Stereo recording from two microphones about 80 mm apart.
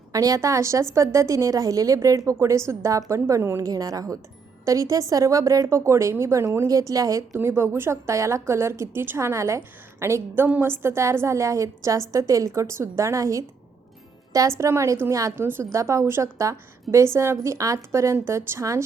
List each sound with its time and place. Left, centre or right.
0.1 s a woman's voice: right
3.6 s a woman's voice: right
6.7 s a woman's voice: right
7.3 s a woman's voice: right
14.6 s a woman's voice: right